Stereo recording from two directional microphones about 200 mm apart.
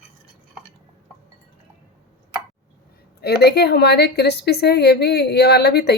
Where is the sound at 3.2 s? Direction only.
55° left (ahead or behind).